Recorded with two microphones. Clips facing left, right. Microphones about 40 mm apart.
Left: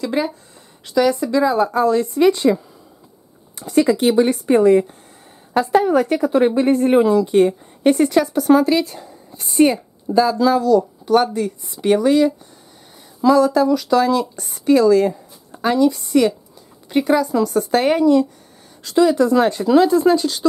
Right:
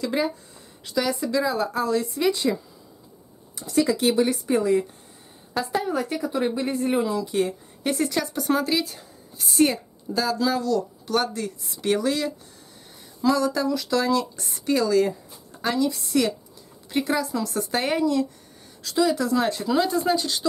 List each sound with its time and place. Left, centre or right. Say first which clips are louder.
0.0 s a woman's voice: left 4 dB; centre; by 2.6 s left
3.5 s a woman's voice: left 6 dB; left
8.0 s speech: left 9 dB; centre